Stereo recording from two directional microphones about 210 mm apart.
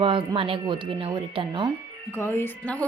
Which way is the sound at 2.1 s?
10° left (ahead or behind).